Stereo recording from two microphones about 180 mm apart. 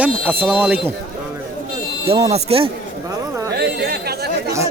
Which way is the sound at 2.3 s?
30° right (ahead or behind).